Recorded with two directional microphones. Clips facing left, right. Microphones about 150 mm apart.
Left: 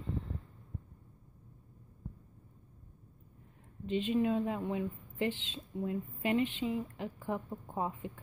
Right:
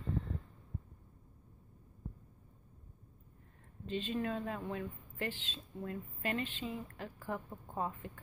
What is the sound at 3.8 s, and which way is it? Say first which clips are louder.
Speech: left 6 dB; 20° left (ahead or behind).